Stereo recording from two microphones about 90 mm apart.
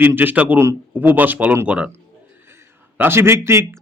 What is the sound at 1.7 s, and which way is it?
Speech, 10° right (ahead or behind).